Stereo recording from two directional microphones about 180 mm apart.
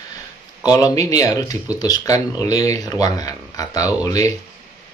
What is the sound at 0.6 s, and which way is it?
Speech, 20° left (ahead or behind).